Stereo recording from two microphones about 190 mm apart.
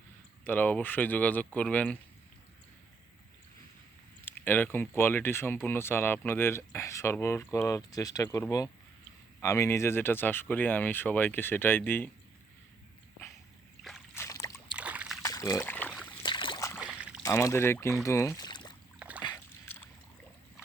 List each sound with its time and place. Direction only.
0.4 s speech: 10° left (ahead or behind)
4.3 s speech: 10° left (ahead or behind)
13.8 s a sound: centre (ahead or behind)
14.2 s boat: 15° left (ahead or behind)
14.8 s boat: 5° right (ahead or behind)
15.2 s trickle: 20° left (ahead or behind)
16.2 s a sound: 25° left (ahead or behind)
16.8 s a sound: 5° right (ahead or behind)
17.2 s speech: 15° left (ahead or behind)
18.9 s splash: 5° right (ahead or behind)